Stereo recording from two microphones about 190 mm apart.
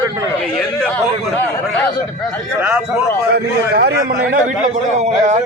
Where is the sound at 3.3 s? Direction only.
60° right (ahead or behind).